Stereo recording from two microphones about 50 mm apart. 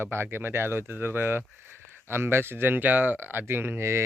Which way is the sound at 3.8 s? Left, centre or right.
Right.